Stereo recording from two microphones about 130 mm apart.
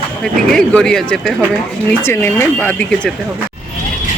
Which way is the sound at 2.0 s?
15° left (ahead or behind).